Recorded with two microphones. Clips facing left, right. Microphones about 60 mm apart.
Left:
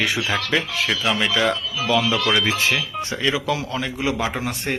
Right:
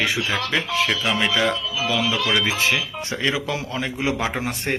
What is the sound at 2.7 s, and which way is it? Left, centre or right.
Speech, right.